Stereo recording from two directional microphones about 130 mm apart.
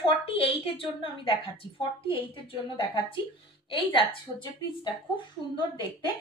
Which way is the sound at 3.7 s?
40° left (ahead or behind).